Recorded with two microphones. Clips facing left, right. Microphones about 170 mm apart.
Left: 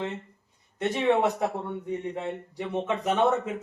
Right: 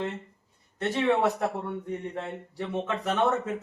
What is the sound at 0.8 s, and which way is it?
Speech, 15° left (ahead or behind).